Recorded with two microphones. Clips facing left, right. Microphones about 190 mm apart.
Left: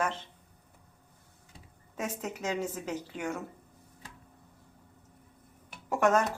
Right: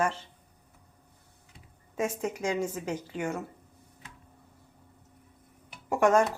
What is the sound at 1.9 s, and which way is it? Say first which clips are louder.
A woman's voice: right 5 dB; 10° right (ahead or behind).